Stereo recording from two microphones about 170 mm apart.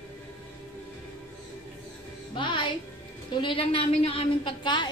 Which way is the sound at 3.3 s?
30° left (ahead or behind).